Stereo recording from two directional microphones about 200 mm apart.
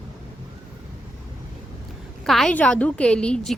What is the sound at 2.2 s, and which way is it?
Speech, centre (ahead or behind).